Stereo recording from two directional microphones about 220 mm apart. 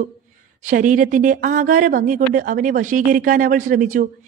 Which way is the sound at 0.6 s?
35° right (ahead or behind).